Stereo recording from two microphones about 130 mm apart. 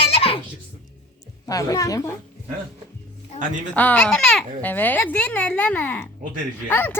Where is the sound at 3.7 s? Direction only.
10° left (ahead or behind).